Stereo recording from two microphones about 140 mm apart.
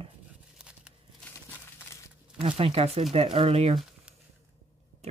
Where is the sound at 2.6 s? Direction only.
45° right (ahead or behind).